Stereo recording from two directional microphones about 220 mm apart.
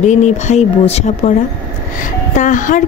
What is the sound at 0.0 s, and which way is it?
Speech, 30° left (ahead or behind).